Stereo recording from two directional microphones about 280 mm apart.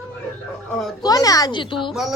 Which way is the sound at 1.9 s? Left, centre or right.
Centre.